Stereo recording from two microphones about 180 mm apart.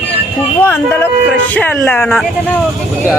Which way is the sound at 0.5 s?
15° left (ahead or behind).